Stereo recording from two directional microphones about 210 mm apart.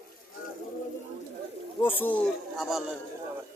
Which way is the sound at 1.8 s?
10° left (ahead or behind).